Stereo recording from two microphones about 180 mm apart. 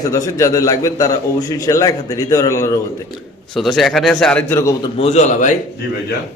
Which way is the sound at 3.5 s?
Centre (ahead or behind).